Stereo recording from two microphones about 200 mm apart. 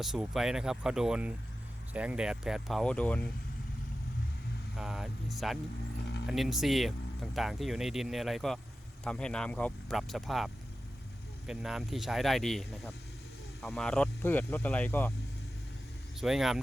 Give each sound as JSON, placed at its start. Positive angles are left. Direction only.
{"t": 0.0, "sound": "speech", "side_deg": 0}
{"t": 4.8, "sound": "speech", "side_deg": 0}
{"t": 16.2, "sound": "speech", "side_deg": 0}